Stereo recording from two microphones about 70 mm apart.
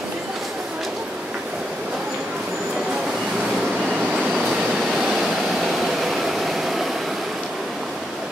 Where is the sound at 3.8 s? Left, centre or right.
Centre.